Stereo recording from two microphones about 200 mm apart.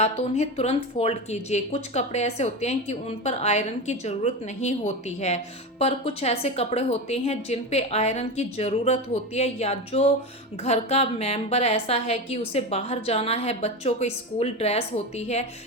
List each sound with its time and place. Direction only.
0.0 s speech: 30° left (ahead or behind)